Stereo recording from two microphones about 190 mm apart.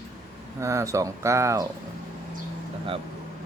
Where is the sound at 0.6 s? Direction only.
15° right (ahead or behind).